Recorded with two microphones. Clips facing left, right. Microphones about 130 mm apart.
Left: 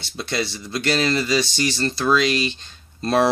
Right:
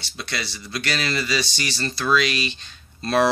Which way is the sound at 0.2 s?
25° left (ahead or behind).